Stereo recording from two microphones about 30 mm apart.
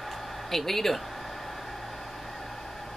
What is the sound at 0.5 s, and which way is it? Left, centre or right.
Speech, centre.